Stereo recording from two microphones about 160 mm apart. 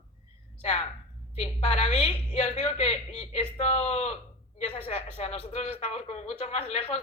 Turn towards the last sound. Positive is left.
turn(degrees=40)  # may be behind; listen again after turning